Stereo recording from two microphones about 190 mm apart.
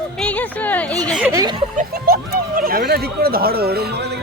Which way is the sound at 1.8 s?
50° right (ahead or behind).